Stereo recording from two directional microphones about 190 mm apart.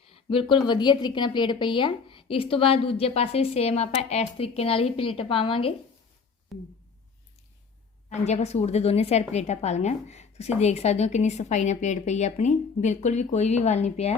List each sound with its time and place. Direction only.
0.1 s a woman's voice: 25° left (ahead or behind)
6.5 s a sound: centre (ahead or behind)
8.1 s a woman's voice: 35° left (ahead or behind)